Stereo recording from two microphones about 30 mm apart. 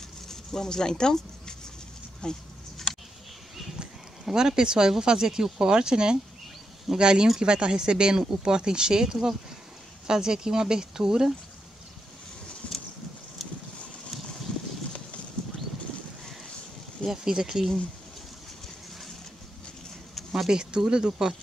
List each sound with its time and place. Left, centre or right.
0.3 s speech: centre
2.2 s speech: left
3.8 s a sound: right
5.0 s speech: right
17.0 s speech: centre
20.4 s speech: right